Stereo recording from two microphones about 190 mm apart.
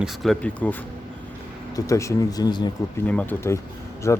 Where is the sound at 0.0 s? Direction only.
Centre (ahead or behind); by 2.7 s 20° left (ahead or behind).